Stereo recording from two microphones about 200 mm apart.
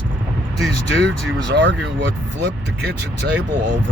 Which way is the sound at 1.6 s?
60° right (ahead or behind).